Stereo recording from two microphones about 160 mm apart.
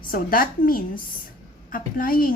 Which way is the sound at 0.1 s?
60° left (ahead or behind).